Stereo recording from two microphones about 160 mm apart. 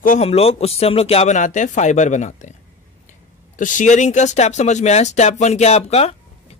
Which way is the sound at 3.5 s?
55° left (ahead or behind).